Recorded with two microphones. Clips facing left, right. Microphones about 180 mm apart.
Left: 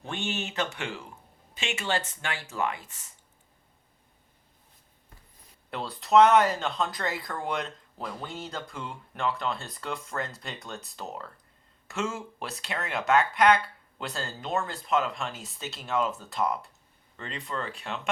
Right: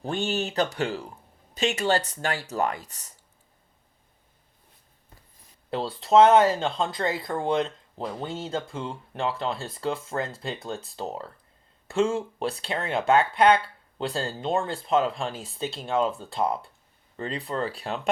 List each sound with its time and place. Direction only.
0.0 s speech: 35° right (ahead or behind)
5.7 s speech: 30° right (ahead or behind)